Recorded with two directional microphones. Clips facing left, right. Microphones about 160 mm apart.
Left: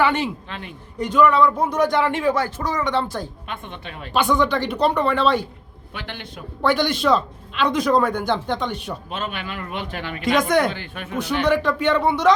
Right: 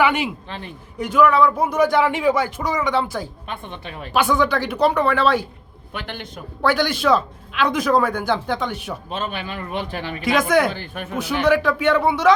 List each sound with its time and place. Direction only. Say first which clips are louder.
0.0 s a man's voice: right 1 dB; 10° right (ahead or behind)
3.4 s a man's voice: right 1 dB; 35° right (ahead or behind)
4.1 s speech: right 1 dB; 5° right (ahead or behind)
5.9 s a man's voice: right 3 dB; 45° right (ahead or behind)
6.6 s speech: even; centre (ahead or behind)
9.0 s a man's voice: right 3 dB; 30° right (ahead or behind)
10.2 s speech: right 1 dB; 5° right (ahead or behind)
10.8 s a man's voice: right 2 dB; 45° right (ahead or behind)
11.2 s speech: right 2 dB; 5° right (ahead or behind)